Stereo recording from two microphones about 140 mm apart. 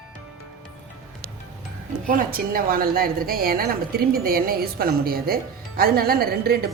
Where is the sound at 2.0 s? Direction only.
85° right.